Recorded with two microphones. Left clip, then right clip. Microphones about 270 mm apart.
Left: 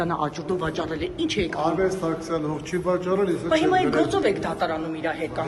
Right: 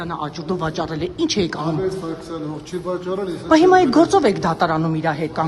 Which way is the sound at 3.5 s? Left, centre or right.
Right.